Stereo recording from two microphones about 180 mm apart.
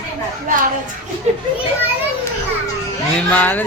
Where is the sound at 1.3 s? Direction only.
35° right (ahead or behind).